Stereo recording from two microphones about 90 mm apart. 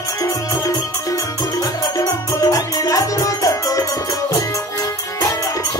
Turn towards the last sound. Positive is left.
turn(degrees=40)  # may be behind; listen again after turning